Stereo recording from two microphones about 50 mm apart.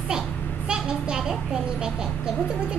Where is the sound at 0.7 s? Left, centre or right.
Centre.